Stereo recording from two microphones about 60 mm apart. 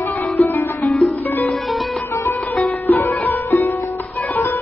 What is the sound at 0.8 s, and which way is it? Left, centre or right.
Music, centre.